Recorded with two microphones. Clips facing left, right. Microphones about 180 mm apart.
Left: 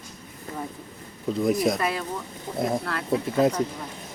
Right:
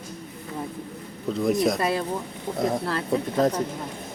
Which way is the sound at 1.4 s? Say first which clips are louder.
Right 1 dB; centre (ahead or behind).